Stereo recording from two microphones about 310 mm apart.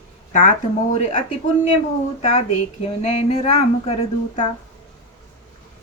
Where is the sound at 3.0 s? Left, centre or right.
Left.